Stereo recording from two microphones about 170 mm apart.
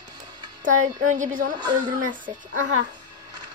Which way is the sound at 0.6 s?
45° right (ahead or behind).